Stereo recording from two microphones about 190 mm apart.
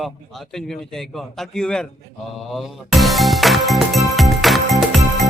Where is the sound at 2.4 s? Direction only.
Centre (ahead or behind).